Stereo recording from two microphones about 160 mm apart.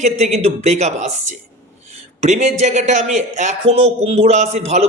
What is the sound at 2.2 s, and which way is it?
A man's voice, 45° right (ahead or behind).